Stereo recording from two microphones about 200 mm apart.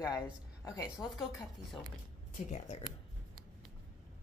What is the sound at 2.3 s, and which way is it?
Speech, 35° left (ahead or behind).